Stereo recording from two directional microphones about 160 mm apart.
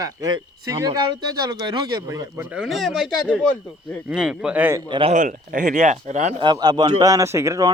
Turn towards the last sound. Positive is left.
turn(degrees=-20)  # may be behind; listen again after turning